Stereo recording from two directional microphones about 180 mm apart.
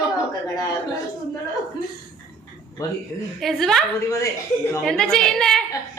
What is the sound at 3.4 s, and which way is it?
Speech, centre (ahead or behind).